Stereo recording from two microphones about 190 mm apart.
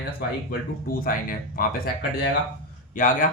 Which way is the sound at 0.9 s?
50° left (ahead or behind).